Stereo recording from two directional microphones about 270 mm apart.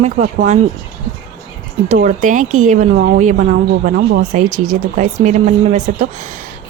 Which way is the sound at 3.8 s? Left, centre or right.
Right.